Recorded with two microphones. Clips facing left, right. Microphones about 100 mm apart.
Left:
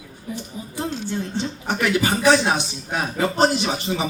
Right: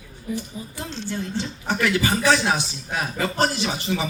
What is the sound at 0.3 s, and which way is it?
Speech, 15° left (ahead or behind).